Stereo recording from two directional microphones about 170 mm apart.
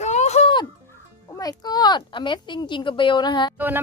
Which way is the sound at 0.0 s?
40° left (ahead or behind).